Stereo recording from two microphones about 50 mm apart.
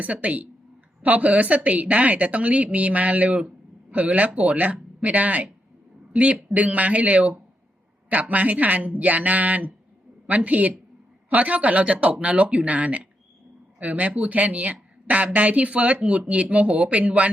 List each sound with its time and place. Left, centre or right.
0.0 s speech: right